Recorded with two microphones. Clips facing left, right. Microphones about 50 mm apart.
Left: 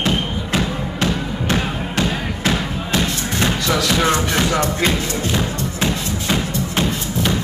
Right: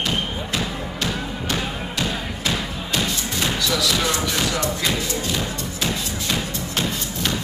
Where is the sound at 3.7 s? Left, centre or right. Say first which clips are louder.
Left 7 dB; left.